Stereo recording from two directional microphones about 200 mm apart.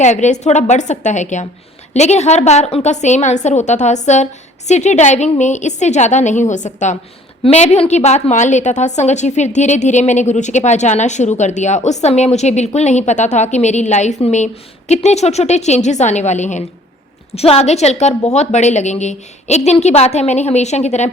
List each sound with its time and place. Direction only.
0.0 s a woman's voice: 35° left (ahead or behind)